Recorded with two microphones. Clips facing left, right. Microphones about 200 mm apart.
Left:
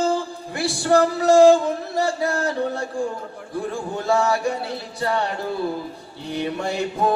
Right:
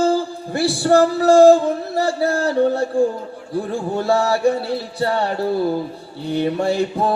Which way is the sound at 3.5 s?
35° right (ahead or behind).